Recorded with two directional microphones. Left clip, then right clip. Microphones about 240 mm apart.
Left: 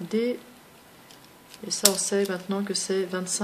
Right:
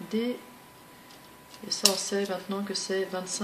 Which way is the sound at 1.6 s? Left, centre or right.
Left.